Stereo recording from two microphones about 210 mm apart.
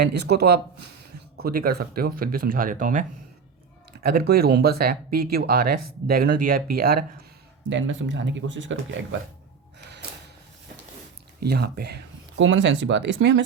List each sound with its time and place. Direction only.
0.0 s speech: 50° right (ahead or behind)
7.7 s speech: 60° right (ahead or behind)
11.3 s speech: 50° right (ahead or behind)